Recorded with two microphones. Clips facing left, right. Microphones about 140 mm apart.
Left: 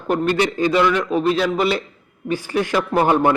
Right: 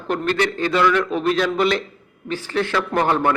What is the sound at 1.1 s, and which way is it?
A man's voice, 5° left (ahead or behind).